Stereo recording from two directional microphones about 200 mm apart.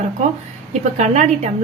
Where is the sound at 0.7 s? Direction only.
35° right (ahead or behind).